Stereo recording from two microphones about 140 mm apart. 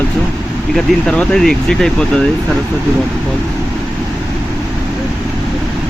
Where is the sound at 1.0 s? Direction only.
5° left (ahead or behind).